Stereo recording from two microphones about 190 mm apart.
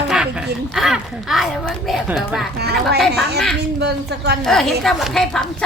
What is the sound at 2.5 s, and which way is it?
Speech, 55° right (ahead or behind).